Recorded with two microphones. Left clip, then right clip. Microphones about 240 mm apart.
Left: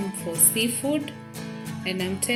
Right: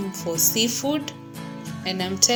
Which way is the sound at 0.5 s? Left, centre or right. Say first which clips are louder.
Right 2 dB; centre.